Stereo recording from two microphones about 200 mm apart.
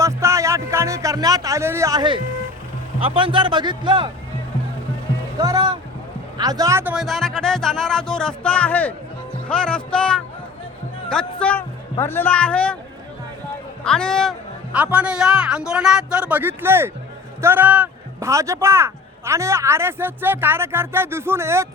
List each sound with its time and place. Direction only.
0.0 s a man's voice: 15° right (ahead or behind)
5.4 s a man's voice: 20° right (ahead or behind)
6.9 s a man's voice: centre (ahead or behind)
13.8 s a man's voice: 5° left (ahead or behind); by 21.7 s 15° right (ahead or behind)